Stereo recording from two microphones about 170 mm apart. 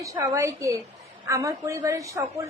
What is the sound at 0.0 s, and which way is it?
A woman's voice, 20° right (ahead or behind).